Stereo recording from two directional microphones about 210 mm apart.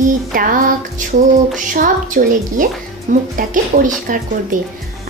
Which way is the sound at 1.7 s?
40° right (ahead or behind).